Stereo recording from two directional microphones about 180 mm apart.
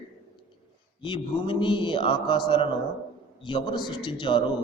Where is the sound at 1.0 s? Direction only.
25° left (ahead or behind).